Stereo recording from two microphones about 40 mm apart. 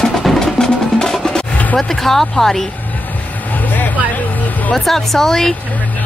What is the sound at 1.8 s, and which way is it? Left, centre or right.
Speech, centre.